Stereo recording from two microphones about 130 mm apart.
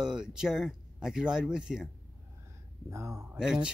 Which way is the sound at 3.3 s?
5° right (ahead or behind).